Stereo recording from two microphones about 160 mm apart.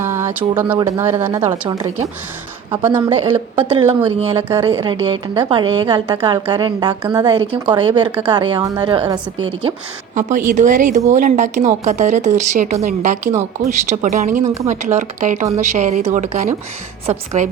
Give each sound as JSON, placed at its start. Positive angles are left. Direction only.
{"t": 0.0, "sound": "speech", "side_deg": -15}
{"t": 3.6, "sound": "a woman's voice", "side_deg": -30}
{"t": 10.2, "sound": "speech", "side_deg": -50}